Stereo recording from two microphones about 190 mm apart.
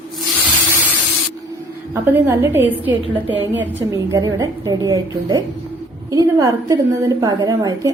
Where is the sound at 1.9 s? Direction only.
15° right (ahead or behind).